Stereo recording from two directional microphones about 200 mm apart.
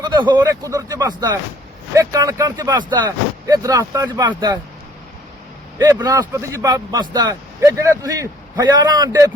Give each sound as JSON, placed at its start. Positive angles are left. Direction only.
{"t": 0.0, "sound": "speech", "side_deg": -20}
{"t": 5.8, "sound": "speech", "side_deg": -20}